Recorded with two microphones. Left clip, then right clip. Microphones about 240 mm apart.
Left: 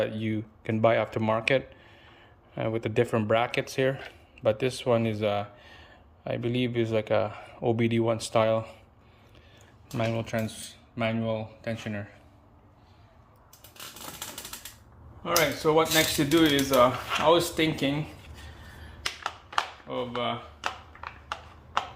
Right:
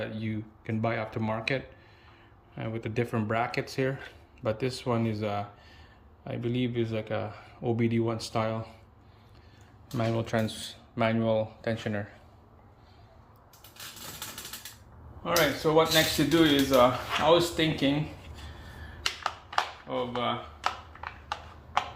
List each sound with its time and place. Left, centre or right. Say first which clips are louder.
0.0 s speech: left 6 dB; centre
10.0 s speech: even; centre
15.2 s speech: left 1 dB; left
19.2 s a sound: left 1 dB; centre
19.9 s speech: even; left